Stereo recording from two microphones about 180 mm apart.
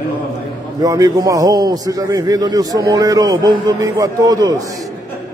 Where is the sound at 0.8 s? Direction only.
20° right (ahead or behind).